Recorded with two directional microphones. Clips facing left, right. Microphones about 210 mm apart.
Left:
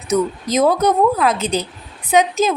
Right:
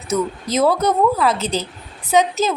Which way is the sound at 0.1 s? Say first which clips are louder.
Left 3 dB; 15° left (ahead or behind).